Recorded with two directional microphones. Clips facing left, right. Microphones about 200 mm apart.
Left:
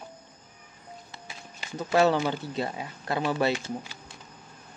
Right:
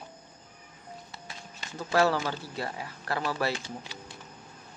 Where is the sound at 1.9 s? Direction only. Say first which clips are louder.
Left 3 dB; 20° left (ahead or behind).